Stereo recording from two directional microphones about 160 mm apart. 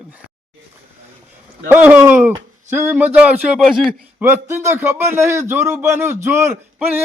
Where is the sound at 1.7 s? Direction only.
10° right (ahead or behind).